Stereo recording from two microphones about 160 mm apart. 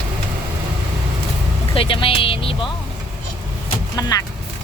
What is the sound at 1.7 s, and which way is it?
Speech, 35° left (ahead or behind).